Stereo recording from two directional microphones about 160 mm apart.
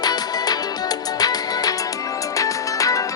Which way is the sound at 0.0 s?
25° left (ahead or behind).